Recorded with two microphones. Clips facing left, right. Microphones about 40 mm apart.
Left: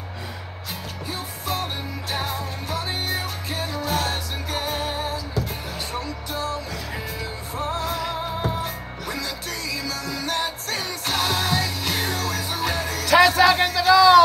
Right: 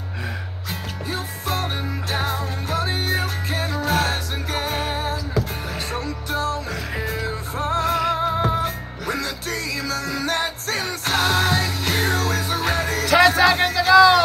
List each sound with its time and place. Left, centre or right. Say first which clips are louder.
1.1 s music: right 2 dB; right
5.9 s music: right 4 dB; right
8.2 s music: right 6 dB; right
9.1 s music: right 5 dB; right
13.4 s music: even; centre
13.8 s a sound: right 2 dB; right